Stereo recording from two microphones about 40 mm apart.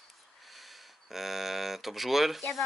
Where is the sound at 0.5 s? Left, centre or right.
Centre.